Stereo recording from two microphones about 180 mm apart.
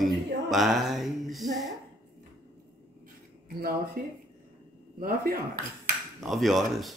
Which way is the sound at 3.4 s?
60° right (ahead or behind).